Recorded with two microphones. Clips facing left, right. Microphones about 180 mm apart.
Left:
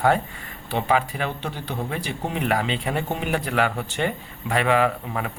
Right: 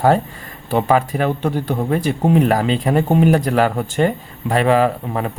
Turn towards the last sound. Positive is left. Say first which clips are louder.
# right 5 dB
turn(degrees=-35)  # may be behind; listen again after turning